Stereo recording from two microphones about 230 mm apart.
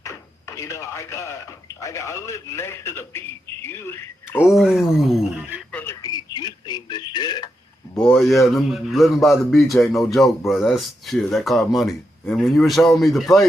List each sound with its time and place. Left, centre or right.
0.0 s speech: centre
4.4 s speech: centre
5.7 s speech: centre
7.9 s speech: centre